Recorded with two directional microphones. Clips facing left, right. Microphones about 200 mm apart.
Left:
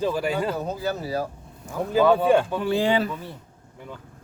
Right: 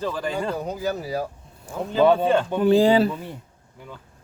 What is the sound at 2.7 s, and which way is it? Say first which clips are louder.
Speech: right 5 dB; 35° right (ahead or behind).